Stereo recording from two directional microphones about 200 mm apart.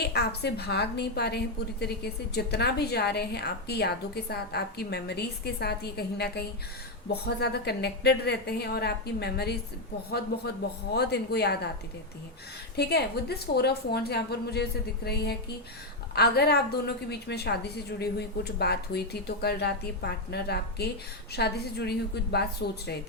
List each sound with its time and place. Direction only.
0.0 s a woman's voice: 55° left (ahead or behind)
12.7 s a woman's voice: 55° left (ahead or behind)